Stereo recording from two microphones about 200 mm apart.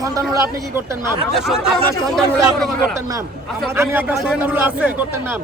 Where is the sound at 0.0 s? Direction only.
15° right (ahead or behind).